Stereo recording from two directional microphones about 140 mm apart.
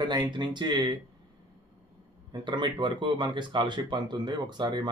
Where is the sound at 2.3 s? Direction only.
35° right (ahead or behind).